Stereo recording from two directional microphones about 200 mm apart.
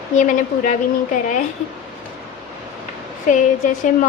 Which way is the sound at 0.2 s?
40° left (ahead or behind).